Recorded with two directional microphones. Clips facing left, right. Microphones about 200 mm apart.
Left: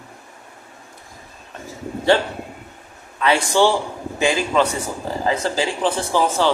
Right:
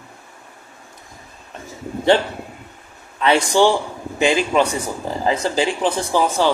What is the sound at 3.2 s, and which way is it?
Speech, 20° right (ahead or behind).